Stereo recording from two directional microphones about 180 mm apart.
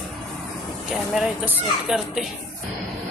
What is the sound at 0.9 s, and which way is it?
Speech, 5° right (ahead or behind).